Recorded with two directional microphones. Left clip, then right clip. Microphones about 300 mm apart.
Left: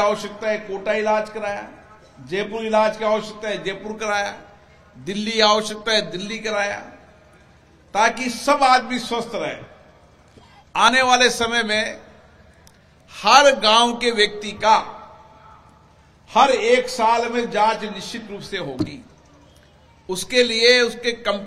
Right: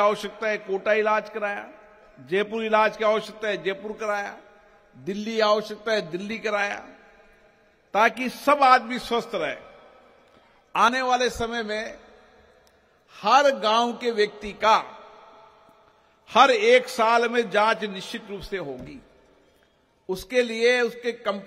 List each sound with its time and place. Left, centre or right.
0.0 s a man's voice: right
7.9 s a man's voice: right
10.7 s a man's voice: right
13.1 s a man's voice: right
16.3 s a man's voice: right
20.1 s a man's voice: right